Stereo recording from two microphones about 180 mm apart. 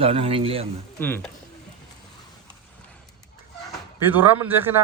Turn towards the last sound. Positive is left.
turn(degrees=-10)  # may be behind; listen again after turning